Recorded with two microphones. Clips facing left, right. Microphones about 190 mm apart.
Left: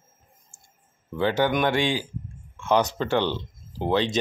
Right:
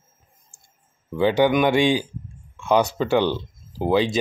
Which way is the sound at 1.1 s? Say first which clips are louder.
Right 5 dB; 15° right (ahead or behind).